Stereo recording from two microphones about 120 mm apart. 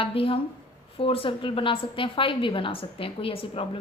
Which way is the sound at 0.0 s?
50° left (ahead or behind).